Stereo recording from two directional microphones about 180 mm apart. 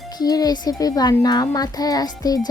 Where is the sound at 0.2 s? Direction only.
20° left (ahead or behind).